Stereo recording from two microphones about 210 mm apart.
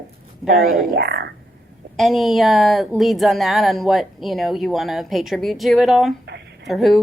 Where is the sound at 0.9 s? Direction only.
55° right (ahead or behind).